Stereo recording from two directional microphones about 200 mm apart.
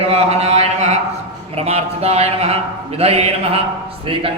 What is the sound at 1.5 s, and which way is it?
Speech, 30° right (ahead or behind).